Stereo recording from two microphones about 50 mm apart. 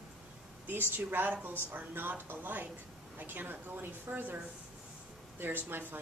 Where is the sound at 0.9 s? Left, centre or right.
Right.